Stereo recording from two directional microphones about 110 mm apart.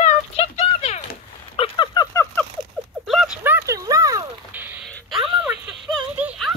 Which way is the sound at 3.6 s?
30° right (ahead or behind).